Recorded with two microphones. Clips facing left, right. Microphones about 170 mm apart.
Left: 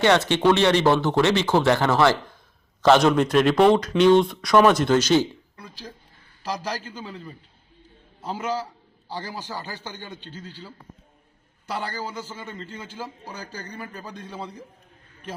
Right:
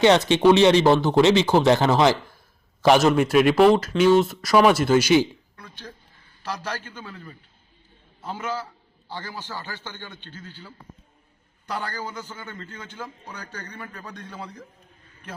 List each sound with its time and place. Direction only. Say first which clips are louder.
0.0 s speech: right 2 dB; 15° right (ahead or behind)
6.6 s a man's voice: left 2 dB; 15° left (ahead or behind)
9.4 s a man's voice: left 1 dB; 15° left (ahead or behind)
10.4 s speech: left 2 dB; 35° left (ahead or behind)
11.6 s a man's voice: left 1 dB; 5° left (ahead or behind)
12.3 s a man's voice: left 2 dB; 25° left (ahead or behind)
13.7 s a man's voice: left 2 dB; 15° left (ahead or behind)
14.1 s a man's voice: left 2 dB; 25° left (ahead or behind)